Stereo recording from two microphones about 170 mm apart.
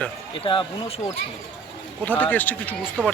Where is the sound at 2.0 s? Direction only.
10° left (ahead or behind).